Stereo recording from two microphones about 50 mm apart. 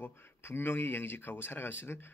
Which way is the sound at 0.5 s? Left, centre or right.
Left.